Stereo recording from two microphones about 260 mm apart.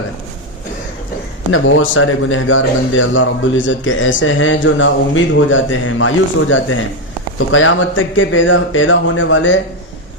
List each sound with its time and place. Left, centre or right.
1.5 s a man's voice: left